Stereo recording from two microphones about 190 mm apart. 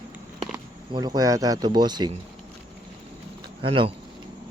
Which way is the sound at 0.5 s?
20° right (ahead or behind).